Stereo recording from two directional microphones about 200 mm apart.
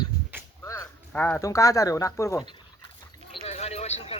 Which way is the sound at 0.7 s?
10° left (ahead or behind).